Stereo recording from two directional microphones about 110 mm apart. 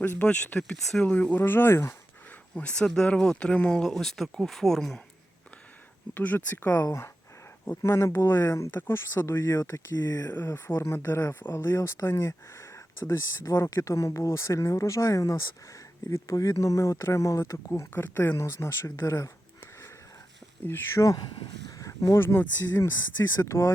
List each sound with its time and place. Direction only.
0.0 s speech: 15° left (ahead or behind)
2.6 s speech: 10° left (ahead or behind)
6.1 s speech: 15° left (ahead or behind)
20.7 s speech: 25° left (ahead or behind)